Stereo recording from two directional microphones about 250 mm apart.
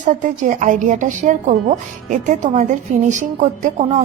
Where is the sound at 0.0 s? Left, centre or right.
Right.